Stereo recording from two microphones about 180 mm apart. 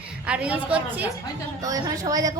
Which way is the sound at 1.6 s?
20° right (ahead or behind).